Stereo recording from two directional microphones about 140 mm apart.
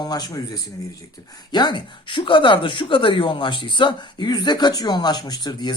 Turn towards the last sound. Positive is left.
turn(degrees=30)  # may be behind; listen again after turning